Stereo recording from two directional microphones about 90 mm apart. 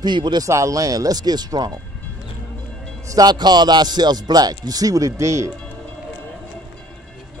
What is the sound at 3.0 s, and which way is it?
A man's voice, 45° right (ahead or behind).